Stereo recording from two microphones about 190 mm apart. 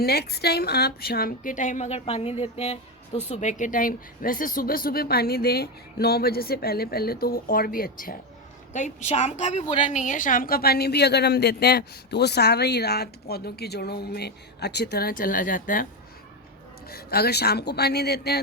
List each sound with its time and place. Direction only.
0.0 s speech: 55° left (ahead or behind)
8.7 s a woman's voice: 40° left (ahead or behind)
16.9 s a woman's voice: 55° left (ahead or behind)